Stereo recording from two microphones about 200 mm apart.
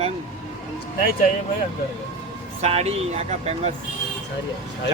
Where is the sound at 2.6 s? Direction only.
30° right (ahead or behind).